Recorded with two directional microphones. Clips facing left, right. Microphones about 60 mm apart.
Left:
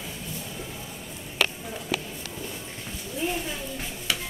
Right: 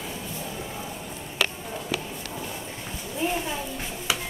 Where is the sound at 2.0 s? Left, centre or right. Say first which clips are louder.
Right 2 dB; centre.